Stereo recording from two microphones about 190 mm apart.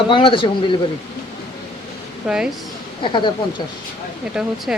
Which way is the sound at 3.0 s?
25° left (ahead or behind).